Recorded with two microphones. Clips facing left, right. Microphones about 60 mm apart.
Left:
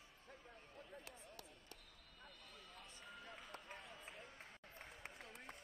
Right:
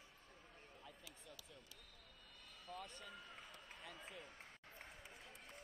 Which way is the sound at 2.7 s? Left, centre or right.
Right.